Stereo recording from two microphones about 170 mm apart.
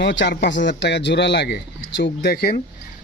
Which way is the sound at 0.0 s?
90° left.